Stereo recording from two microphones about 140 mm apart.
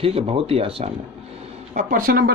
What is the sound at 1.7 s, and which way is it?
Speech, 75° right (ahead or behind).